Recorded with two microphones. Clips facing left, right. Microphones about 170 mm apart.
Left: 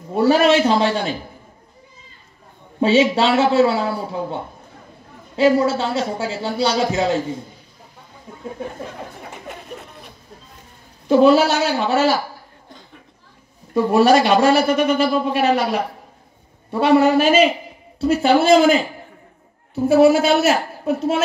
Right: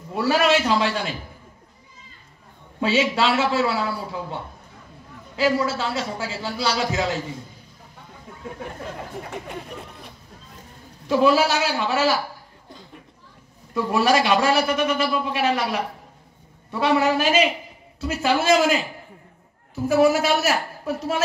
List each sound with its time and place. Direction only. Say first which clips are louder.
0.1 s a man's voice: left 5 dB; 30° left (ahead or behind)
2.8 s speech: left 6 dB; 30° left (ahead or behind)
11.1 s speech: left 5 dB; 30° left (ahead or behind)
13.7 s a man's voice: left 6 dB; 30° left (ahead or behind)